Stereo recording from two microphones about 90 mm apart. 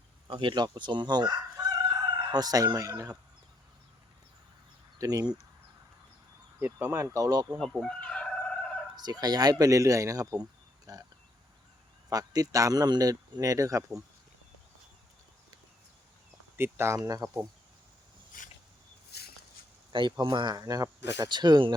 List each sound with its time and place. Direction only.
0.3 s speech: 65° right (ahead or behind); by 3.2 s 40° right (ahead or behind)
4.9 s speech: 45° right (ahead or behind)
6.6 s a man's voice: 20° right (ahead or behind); by 7.4 s 40° right (ahead or behind)
7.6 s chicken: 5° left (ahead or behind)
9.0 s speech: 50° right (ahead or behind)
12.0 s a man's voice: 45° right (ahead or behind)
16.6 s speech: 25° right (ahead or behind)
17.0 s speech: 45° right (ahead or behind)
19.9 s speech: 60° right (ahead or behind); by 21.3 s 40° right (ahead or behind)
21.3 s speech: 55° right (ahead or behind)